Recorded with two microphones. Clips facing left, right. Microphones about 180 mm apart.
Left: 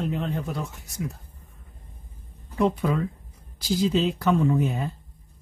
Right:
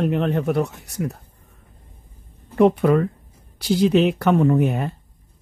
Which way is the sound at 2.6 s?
65° right (ahead or behind).